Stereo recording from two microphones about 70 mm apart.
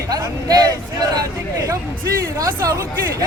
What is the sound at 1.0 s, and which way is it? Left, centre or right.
Speech, right.